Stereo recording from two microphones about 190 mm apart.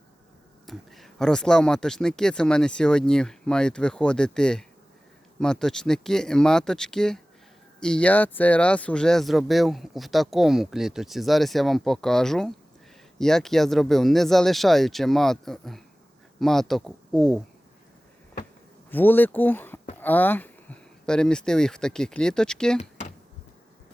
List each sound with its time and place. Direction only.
0.7 s speech: centre (ahead or behind)
18.9 s speech: 10° left (ahead or behind)
22.8 s computer keyboard: 35° left (ahead or behind)